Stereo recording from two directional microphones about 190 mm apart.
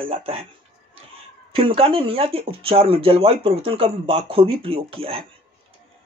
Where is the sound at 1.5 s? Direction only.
25° right (ahead or behind).